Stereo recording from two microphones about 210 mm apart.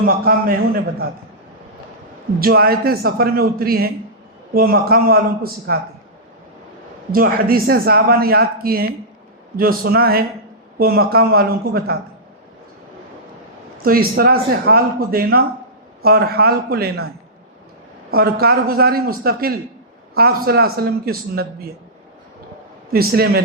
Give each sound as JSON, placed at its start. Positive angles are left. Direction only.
{"t": 0.0, "sound": "speech", "side_deg": -45}
{"t": 2.4, "sound": "speech", "side_deg": -45}
{"t": 7.1, "sound": "speech", "side_deg": -45}
{"t": 13.8, "sound": "speech", "side_deg": -45}
{"t": 18.1, "sound": "speech", "side_deg": -45}
{"t": 22.9, "sound": "speech", "side_deg": -45}